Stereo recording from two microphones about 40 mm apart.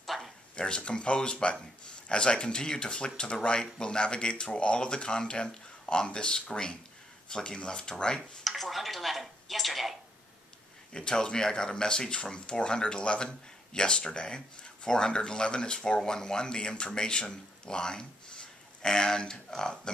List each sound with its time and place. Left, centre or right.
0.0 s a sound: centre
0.6 s speech: left
8.5 s speech: centre
10.9 s speech: centre